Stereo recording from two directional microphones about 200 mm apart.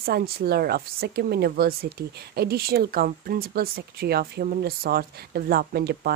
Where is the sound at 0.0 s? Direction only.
50° right (ahead or behind).